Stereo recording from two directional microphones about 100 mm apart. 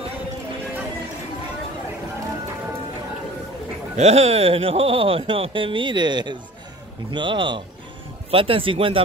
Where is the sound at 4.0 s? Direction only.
90° right.